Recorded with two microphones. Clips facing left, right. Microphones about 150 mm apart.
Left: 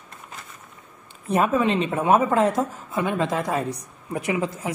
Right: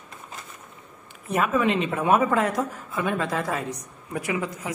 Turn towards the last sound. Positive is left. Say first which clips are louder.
# left 3 dB
turn(degrees=25)  # may be behind; listen again after turning